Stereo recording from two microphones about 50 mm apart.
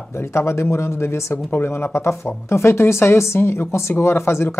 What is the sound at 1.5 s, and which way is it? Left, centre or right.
Speech, left.